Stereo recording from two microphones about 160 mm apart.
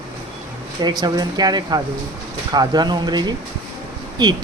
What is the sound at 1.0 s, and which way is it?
Speech, 25° right (ahead or behind).